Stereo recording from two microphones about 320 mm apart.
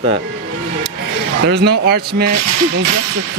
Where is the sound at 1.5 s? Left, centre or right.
Right.